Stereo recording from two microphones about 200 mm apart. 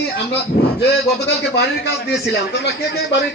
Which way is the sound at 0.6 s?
55° left (ahead or behind).